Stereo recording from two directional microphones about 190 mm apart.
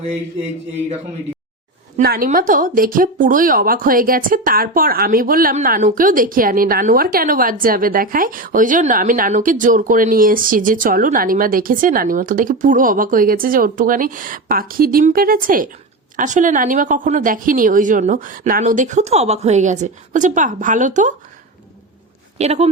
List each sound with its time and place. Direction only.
2.0 s speech: 50° right (ahead or behind)
22.4 s speech: 35° right (ahead or behind)